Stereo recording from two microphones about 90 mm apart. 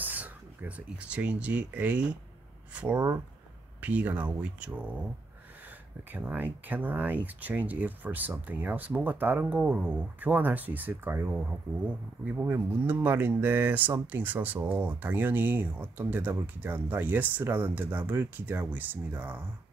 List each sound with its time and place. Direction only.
0.0 s speech: 20° right (ahead or behind)
6.1 s speech: 20° right (ahead or behind)